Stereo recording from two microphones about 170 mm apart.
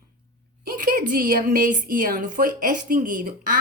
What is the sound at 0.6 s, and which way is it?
Speech, 55° right (ahead or behind).